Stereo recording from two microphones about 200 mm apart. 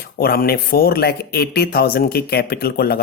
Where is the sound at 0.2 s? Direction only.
50° left (ahead or behind).